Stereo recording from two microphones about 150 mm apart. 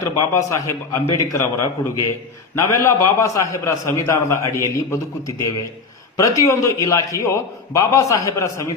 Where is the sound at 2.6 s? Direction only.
20° left (ahead or behind).